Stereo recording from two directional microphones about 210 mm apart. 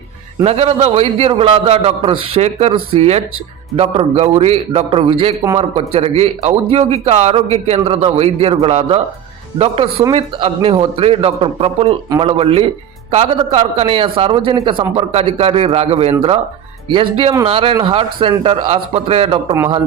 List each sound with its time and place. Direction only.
0.4 s a man's voice: 30° right (ahead or behind)